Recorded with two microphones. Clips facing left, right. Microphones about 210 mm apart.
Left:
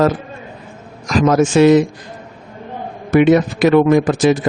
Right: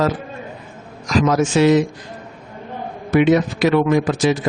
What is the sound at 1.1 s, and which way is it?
Speech, 50° left (ahead or behind).